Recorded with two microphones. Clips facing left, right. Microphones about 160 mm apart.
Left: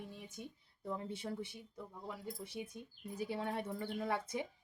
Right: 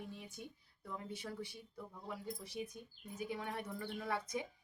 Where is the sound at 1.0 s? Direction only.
30° left (ahead or behind).